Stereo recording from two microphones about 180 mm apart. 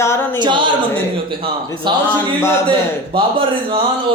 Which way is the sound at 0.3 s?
25° right (ahead or behind).